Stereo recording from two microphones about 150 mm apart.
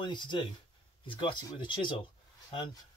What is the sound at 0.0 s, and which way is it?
Speech, 30° left (ahead or behind).